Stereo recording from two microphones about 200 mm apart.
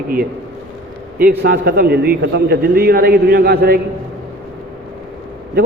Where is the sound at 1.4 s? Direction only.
50° right (ahead or behind).